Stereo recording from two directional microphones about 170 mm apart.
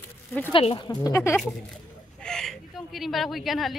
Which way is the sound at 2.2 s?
5° left (ahead or behind).